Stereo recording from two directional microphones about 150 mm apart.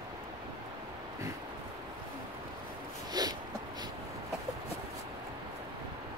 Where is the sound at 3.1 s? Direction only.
25° right (ahead or behind).